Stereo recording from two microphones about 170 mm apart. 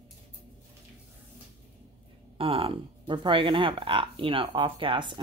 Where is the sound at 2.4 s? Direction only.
35° right (ahead or behind).